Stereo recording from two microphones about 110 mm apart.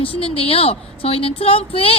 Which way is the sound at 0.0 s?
60° left (ahead or behind).